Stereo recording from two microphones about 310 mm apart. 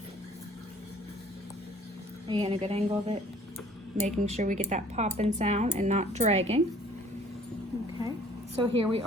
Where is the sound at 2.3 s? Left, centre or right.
Centre.